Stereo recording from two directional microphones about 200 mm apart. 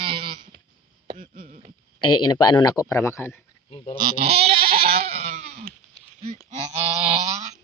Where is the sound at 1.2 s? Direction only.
40° right (ahead or behind).